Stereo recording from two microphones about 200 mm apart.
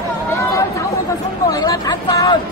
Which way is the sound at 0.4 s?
15° left (ahead or behind).